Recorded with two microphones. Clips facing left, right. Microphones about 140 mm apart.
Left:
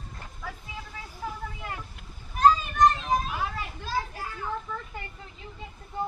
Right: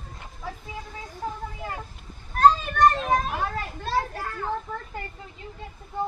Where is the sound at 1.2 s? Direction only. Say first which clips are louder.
Right 3 dB; 35° right (ahead or behind).